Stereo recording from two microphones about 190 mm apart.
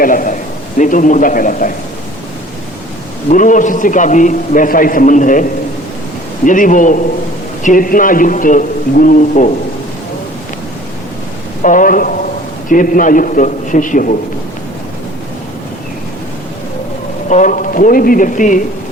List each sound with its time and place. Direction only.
0.0 s a man's voice: 45° left (ahead or behind)
3.2 s a man's voice: 40° left (ahead or behind)
11.6 s a man's voice: 45° left (ahead or behind)
17.2 s a man's voice: 40° left (ahead or behind)